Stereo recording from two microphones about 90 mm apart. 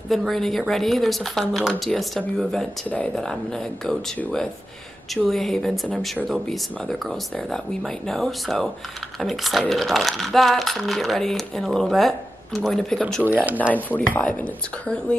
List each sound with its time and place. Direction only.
0.1 s speech: centre (ahead or behind)
5.1 s speech: 5° left (ahead or behind)
13.2 s speech: 20° right (ahead or behind)
13.7 s speech: 20° left (ahead or behind)